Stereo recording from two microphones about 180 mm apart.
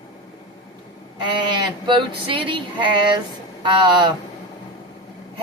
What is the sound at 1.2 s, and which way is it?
Speech, 25° right (ahead or behind).